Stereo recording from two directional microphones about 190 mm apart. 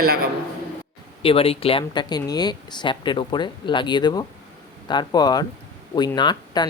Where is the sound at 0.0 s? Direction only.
50° right (ahead or behind).